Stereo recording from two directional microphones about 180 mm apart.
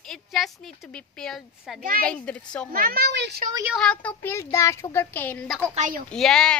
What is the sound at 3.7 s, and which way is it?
Speech, 5° left (ahead or behind).